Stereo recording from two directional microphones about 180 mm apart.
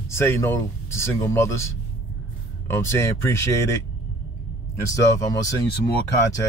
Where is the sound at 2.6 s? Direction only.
15° left (ahead or behind).